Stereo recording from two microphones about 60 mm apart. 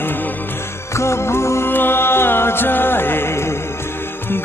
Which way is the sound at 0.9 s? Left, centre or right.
Left.